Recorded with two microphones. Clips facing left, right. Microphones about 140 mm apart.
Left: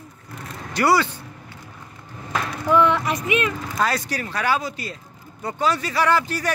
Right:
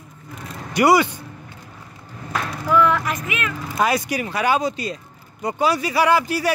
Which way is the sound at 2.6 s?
30° left (ahead or behind).